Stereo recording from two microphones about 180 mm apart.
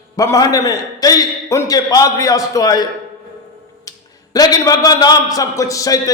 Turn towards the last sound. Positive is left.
turn(degrees=20)  # may be behind; listen again after turning